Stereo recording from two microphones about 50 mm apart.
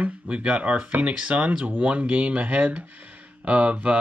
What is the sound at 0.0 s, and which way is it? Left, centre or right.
Speech, right.